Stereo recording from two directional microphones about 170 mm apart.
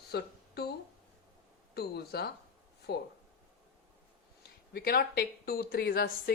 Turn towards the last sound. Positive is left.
turn(degrees=60)  # may be behind; listen again after turning